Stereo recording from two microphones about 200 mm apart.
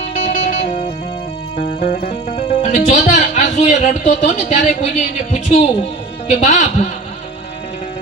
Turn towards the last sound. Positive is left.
turn(degrees=35)  # may be behind; listen again after turning